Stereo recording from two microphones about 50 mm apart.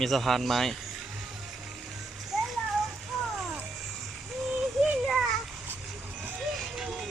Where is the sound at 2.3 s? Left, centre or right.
Centre.